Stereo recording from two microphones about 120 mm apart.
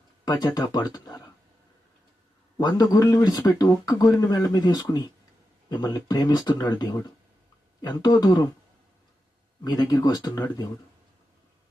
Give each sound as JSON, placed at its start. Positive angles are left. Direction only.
{"t": 0.5, "sound": "speech", "side_deg": 35}
{"t": 2.6, "sound": "speech", "side_deg": 35}
{"t": 9.6, "sound": "speech", "side_deg": 30}